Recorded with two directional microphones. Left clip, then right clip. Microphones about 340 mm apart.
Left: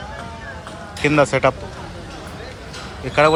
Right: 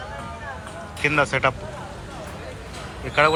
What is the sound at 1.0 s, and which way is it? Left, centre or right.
Speech, centre.